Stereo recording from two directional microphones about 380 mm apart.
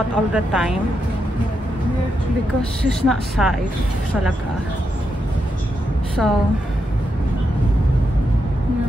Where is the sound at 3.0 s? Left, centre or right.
Centre.